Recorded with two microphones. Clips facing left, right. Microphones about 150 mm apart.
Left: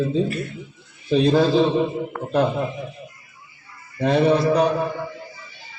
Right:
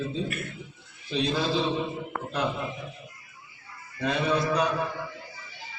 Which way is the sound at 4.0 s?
35° left (ahead or behind).